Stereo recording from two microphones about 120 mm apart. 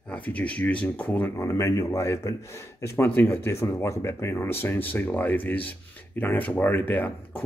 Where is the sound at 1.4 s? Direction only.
25° left (ahead or behind).